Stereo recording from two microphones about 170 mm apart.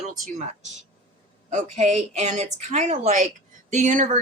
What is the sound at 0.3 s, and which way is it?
Speech, 45° right (ahead or behind).